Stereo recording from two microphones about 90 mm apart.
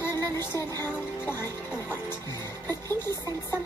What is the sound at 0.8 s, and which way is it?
Music, 25° left (ahead or behind).